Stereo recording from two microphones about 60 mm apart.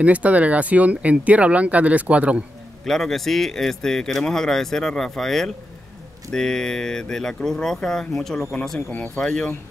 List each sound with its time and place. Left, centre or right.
0.0 s speech: right
2.8 s speech: centre